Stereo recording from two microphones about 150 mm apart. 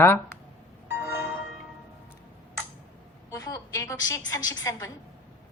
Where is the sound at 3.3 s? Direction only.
20° left (ahead or behind).